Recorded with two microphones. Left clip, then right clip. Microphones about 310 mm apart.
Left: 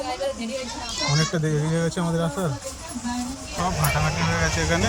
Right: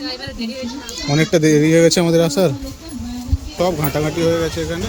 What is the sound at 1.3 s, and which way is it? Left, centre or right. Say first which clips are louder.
Speech: right 13 dB; right.